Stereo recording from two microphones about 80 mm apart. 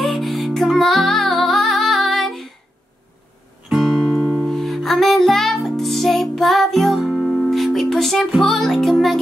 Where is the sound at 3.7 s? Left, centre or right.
Centre.